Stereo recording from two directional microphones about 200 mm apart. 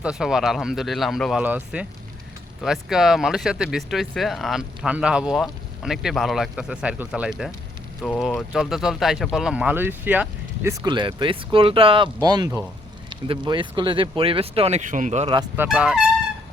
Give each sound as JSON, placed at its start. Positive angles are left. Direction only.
{"t": 0.0, "sound": "speech", "side_deg": -5}
{"t": 15.5, "sound": "speech", "side_deg": -5}